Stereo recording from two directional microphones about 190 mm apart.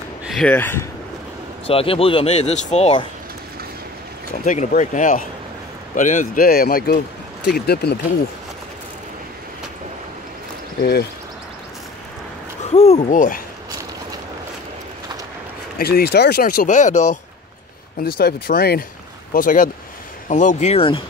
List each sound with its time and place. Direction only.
0.3 s speech: 5° left (ahead or behind)
1.7 s speech: 30° left (ahead or behind)
4.5 s speech: 40° left (ahead or behind); by 7.9 s 55° left (ahead or behind)
10.8 s speech: 55° left (ahead or behind)
12.6 s speech: 35° left (ahead or behind)
15.8 s speech: 55° left (ahead or behind); by 17.2 s 40° left (ahead or behind)
18.0 s speech: 55° left (ahead or behind); by 21.0 s 30° left (ahead or behind)